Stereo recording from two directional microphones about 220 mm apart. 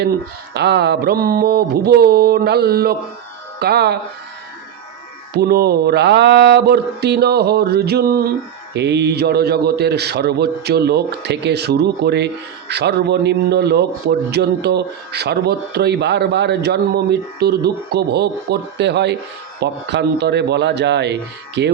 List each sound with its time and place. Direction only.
0.5 s a man's voice: 50° right (ahead or behind)
5.3 s a man's voice: 45° right (ahead or behind)